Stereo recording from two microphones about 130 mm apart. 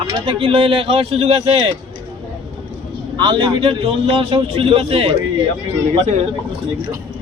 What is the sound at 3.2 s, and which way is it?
Speech, 40° right (ahead or behind).